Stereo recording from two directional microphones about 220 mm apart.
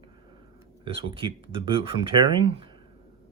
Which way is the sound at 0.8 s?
25° right (ahead or behind).